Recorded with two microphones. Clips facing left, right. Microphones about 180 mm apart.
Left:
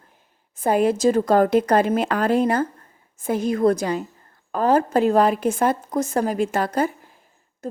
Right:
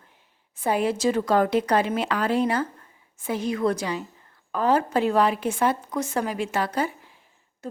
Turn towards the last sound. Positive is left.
turn(degrees=45)  # may be behind; listen again after turning